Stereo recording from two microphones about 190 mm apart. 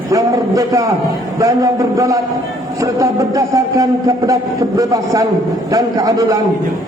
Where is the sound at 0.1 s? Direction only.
15° right (ahead or behind).